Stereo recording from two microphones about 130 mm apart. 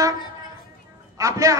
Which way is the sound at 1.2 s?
25° right (ahead or behind).